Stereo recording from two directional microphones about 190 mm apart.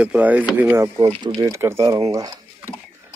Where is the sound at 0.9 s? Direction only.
25° right (ahead or behind).